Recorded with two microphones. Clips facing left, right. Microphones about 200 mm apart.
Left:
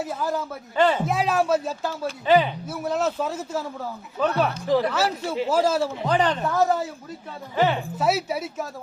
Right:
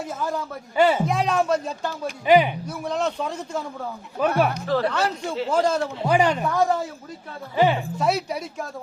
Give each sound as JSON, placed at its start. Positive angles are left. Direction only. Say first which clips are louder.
{"t": 0.0, "sound": "speech", "louder": "left 1 dB", "side_deg": 5}
{"t": 0.8, "sound": "speech", "louder": "right 2 dB", "side_deg": -10}
{"t": 1.0, "sound": "speech", "louder": "even", "side_deg": 5}
{"t": 2.2, "sound": "speech", "louder": "right 2 dB", "side_deg": -15}
{"t": 2.6, "sound": "speech", "louder": "left 1 dB", "side_deg": 5}
{"t": 4.2, "sound": "speech", "louder": "right 2 dB", "side_deg": -10}
{"t": 4.6, "sound": "speech", "louder": "left 1 dB", "side_deg": 15}
{"t": 4.9, "sound": "speech", "louder": "even", "side_deg": 5}
{"t": 6.1, "sound": "speech", "louder": "right 4 dB", "side_deg": -10}
{"t": 6.5, "sound": "speech", "louder": "even", "side_deg": 5}
{"t": 7.5, "sound": "speech", "louder": "right 2 dB", "side_deg": -15}
{"t": 7.8, "sound": "speech", "louder": "even", "side_deg": 5}